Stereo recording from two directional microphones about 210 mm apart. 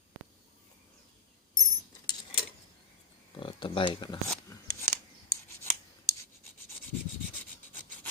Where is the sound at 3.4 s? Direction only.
25° left (ahead or behind).